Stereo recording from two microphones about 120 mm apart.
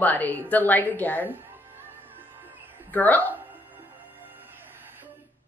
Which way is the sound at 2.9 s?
15° left (ahead or behind).